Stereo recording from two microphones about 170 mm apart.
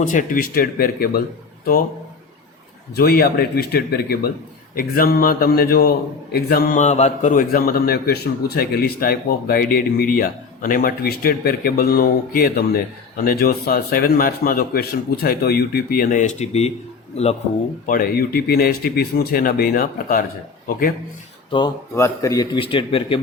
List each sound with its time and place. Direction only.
0.0 s a man's voice: 50° left (ahead or behind)
2.9 s a man's voice: 65° left (ahead or behind)
6.7 s a man's voice: 40° left (ahead or behind)
17.8 s a man's voice: 55° left (ahead or behind)
21.9 s a man's voice: 20° left (ahead or behind)